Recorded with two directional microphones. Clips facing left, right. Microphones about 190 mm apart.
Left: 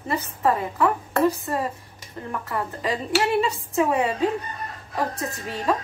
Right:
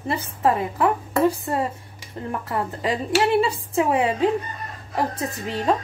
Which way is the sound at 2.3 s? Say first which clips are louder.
Right 2 dB; 30° right (ahead or behind).